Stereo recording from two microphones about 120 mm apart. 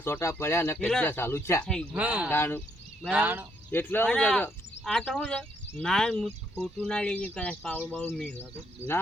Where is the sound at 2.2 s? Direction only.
15° left (ahead or behind).